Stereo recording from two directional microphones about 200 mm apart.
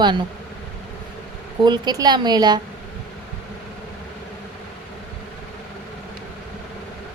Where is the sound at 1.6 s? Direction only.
20° right (ahead or behind).